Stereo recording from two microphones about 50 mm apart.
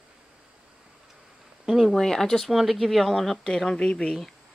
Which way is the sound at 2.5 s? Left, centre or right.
Centre.